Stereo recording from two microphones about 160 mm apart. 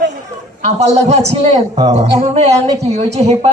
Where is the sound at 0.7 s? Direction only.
45° right (ahead or behind).